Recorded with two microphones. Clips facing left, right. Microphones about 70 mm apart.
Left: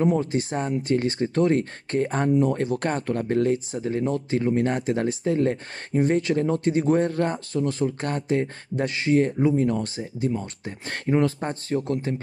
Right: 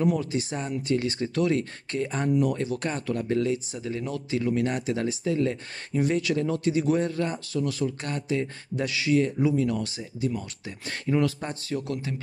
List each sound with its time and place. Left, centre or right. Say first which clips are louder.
0.2 s speech: left 4 dB; left
2.2 s speech: left 2 dB; left
2.5 s speech: left 4 dB; left